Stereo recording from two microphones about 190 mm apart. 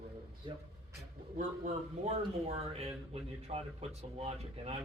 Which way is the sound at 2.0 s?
35° right (ahead or behind).